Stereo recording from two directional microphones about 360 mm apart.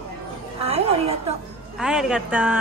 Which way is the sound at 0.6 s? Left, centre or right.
Centre.